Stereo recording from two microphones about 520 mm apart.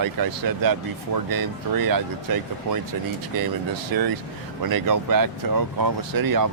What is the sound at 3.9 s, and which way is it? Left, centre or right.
Speech, right.